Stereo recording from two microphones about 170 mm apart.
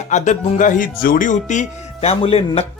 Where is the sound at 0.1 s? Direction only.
45° left (ahead or behind).